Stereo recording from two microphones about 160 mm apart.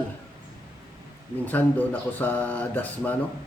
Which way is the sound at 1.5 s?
10° left (ahead or behind).